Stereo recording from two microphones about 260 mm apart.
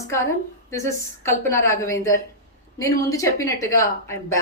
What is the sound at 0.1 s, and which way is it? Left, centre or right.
A woman's voice, centre.